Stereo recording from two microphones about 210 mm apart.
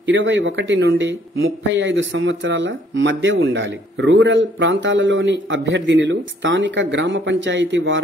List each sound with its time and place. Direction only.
0.0 s speech: 60° right (ahead or behind)